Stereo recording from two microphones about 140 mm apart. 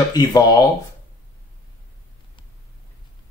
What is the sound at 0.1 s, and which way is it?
Speech, 25° left (ahead or behind).